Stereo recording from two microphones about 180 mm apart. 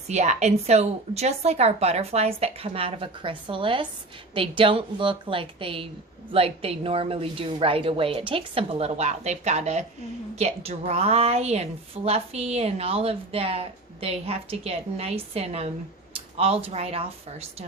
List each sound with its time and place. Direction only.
0.1 s a woman's voice: 40° right (ahead or behind)